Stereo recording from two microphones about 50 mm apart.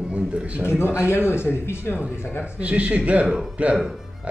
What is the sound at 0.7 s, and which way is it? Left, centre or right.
Speech, left.